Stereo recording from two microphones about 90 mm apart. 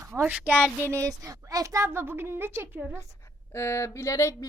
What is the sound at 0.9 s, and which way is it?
A woman's voice, 35° right (ahead or behind).